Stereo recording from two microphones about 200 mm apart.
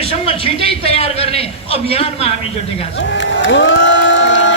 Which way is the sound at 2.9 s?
65° left (ahead or behind).